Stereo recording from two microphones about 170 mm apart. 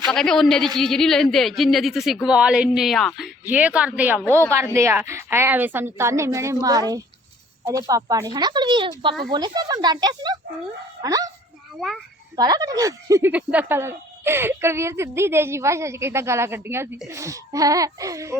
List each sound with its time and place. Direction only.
0.1 s a woman's voice: 5° left (ahead or behind); by 11.3 s 20° right (ahead or behind)
12.4 s speech: 20° right (ahead or behind)